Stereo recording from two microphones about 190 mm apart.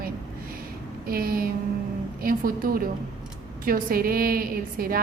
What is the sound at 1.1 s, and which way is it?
A woman's voice, 50° right (ahead or behind).